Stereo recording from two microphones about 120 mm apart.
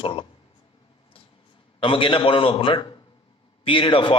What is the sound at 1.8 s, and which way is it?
Speech, 45° left (ahead or behind).